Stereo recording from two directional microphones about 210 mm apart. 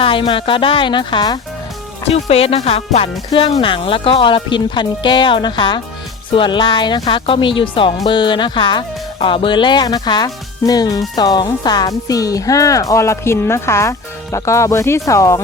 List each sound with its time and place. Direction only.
0.0 s speech: 25° left (ahead or behind)